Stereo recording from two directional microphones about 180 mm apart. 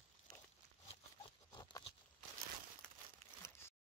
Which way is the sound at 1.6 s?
20° left (ahead or behind).